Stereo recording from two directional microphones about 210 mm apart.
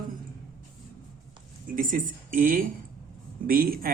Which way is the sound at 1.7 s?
40° right (ahead or behind).